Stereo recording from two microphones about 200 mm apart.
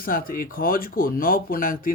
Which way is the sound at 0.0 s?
45° left (ahead or behind).